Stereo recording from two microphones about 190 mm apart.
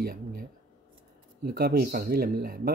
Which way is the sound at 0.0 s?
55° right (ahead or behind).